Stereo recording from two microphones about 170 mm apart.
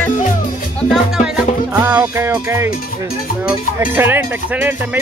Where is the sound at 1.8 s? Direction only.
15° right (ahead or behind).